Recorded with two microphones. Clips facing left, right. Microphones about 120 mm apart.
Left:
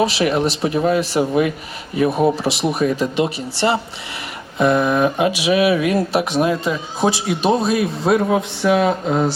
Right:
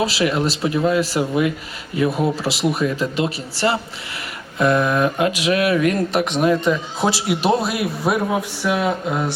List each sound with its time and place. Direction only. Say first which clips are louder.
0.0 s speech: left 2 dB; 20° left (ahead or behind)
2.4 s speech: left 1 dB; 15° left (ahead or behind)